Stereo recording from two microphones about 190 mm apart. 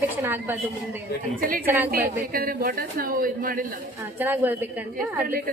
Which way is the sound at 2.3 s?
50° right (ahead or behind).